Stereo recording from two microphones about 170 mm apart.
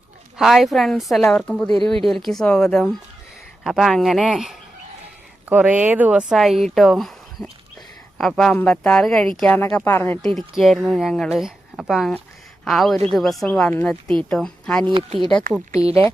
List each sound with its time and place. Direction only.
0.3 s speech: centre (ahead or behind)
10.2 s speech: centre (ahead or behind)
14.8 s speech: 30° right (ahead or behind)